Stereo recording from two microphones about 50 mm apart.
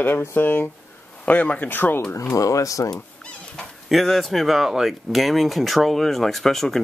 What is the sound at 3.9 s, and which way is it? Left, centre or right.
Speech, centre.